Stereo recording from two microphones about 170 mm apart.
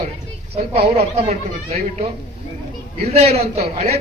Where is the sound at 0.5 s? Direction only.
40° right (ahead or behind).